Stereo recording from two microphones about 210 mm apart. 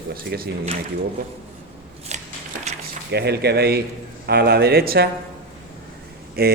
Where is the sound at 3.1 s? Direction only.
50° right (ahead or behind).